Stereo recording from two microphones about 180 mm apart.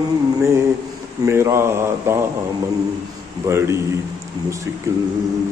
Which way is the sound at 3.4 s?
15° right (ahead or behind).